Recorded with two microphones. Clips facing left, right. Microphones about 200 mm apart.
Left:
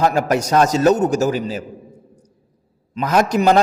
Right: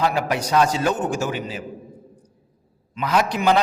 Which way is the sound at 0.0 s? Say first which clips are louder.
Left 5 dB; 45° left (ahead or behind).